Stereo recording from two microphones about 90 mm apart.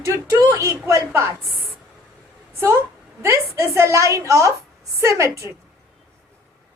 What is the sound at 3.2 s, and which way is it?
A woman's voice, 35° right (ahead or behind).